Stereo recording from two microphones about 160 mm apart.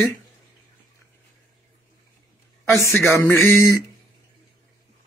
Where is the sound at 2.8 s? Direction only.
15° left (ahead or behind).